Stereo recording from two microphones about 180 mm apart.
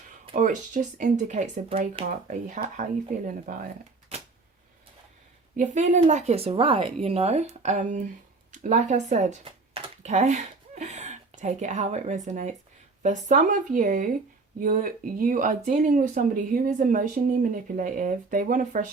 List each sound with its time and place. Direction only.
0.3 s speech: 45° right (ahead or behind)
5.5 s speech: 40° right (ahead or behind)